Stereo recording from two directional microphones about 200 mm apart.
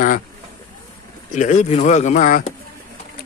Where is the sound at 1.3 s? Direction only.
40° left (ahead or behind).